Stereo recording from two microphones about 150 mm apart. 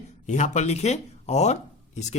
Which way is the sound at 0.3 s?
55° left (ahead or behind).